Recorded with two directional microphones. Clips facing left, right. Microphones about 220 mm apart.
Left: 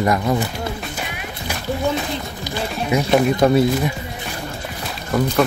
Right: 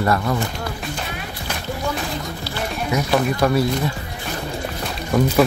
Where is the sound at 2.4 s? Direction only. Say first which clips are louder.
Left 2 dB; 25° left (ahead or behind).